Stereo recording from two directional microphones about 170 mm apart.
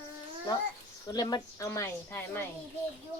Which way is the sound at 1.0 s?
25° left (ahead or behind).